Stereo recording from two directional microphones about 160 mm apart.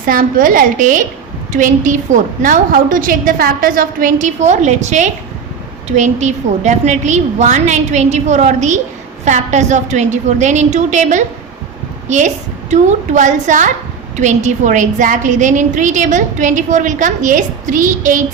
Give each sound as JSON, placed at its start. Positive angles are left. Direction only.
{"t": 0.0, "sound": "a woman's voice", "side_deg": -60}